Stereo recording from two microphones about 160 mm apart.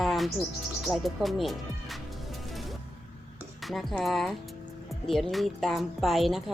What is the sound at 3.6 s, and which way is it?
A woman's voice, centre (ahead or behind).